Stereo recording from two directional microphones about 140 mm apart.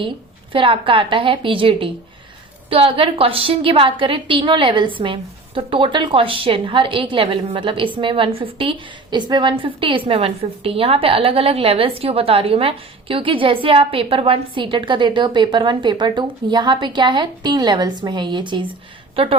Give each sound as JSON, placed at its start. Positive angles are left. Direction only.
{"t": 0.5, "sound": "a woman's voice", "side_deg": -40}